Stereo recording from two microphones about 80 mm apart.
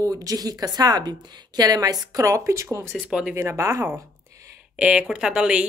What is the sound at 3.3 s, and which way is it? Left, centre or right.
Speech, right.